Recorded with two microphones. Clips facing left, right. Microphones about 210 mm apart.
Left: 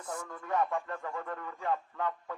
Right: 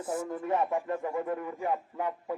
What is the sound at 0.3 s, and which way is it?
Speech, 30° right (ahead or behind).